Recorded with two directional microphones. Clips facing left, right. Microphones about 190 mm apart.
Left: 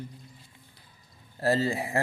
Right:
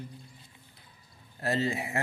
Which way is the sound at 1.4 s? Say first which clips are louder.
Left 4 dB; 35° left (ahead or behind).